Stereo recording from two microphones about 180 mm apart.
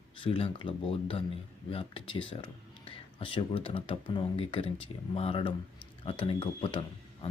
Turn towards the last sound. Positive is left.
turn(degrees=30)  # may be behind; listen again after turning